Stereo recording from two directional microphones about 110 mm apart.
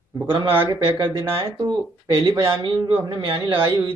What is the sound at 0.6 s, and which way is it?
Speech, 50° right (ahead or behind).